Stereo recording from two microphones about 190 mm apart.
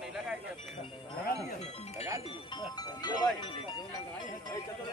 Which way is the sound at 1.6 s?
35° left (ahead or behind).